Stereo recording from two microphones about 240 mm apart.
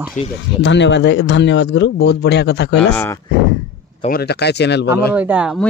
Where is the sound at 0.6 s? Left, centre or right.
Left.